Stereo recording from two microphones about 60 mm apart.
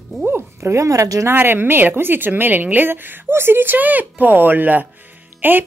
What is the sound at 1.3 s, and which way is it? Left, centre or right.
Speech, right.